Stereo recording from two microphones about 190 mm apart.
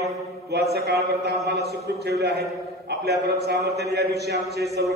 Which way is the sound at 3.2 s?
60° right (ahead or behind).